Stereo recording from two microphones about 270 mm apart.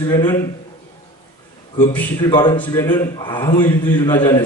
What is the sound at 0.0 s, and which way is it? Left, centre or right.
Speech, centre.